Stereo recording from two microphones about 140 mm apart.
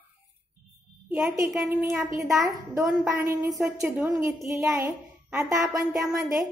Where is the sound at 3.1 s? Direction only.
20° right (ahead or behind).